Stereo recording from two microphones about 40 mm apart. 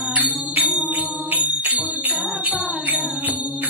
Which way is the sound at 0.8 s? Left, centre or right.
Right.